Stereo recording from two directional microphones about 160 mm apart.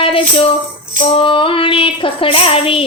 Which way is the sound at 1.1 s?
30° left (ahead or behind).